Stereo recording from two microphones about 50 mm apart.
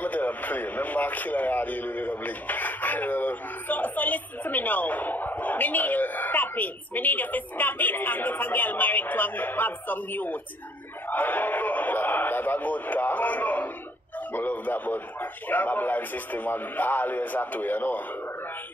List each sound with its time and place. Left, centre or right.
0.0 s a man's voice: left
11.1 s a sound: left
14.3 s a man's voice: left